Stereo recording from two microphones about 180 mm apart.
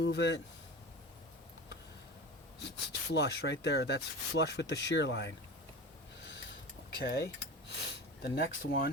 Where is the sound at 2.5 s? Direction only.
65° left (ahead or behind).